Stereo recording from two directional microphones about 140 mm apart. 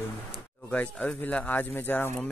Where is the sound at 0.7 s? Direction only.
10° left (ahead or behind).